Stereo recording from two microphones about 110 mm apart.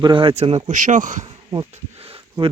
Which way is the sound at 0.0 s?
50° right (ahead or behind).